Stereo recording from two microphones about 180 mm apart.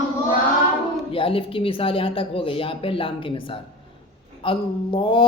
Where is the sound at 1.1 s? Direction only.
30° left (ahead or behind).